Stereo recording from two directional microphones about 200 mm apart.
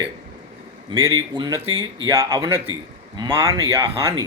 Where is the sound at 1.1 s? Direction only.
20° right (ahead or behind).